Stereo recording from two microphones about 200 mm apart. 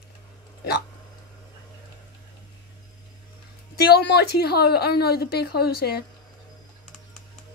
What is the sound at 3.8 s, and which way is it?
A woman's voice, 55° left (ahead or behind).